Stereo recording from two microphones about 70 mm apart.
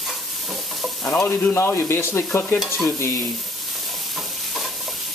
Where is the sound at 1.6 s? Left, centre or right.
Left.